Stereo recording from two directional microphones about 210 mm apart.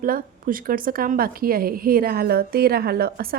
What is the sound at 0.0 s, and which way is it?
A woman's voice, 40° right (ahead or behind).